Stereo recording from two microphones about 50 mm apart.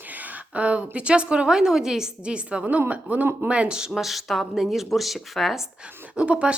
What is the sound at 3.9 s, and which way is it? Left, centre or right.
Speech, centre.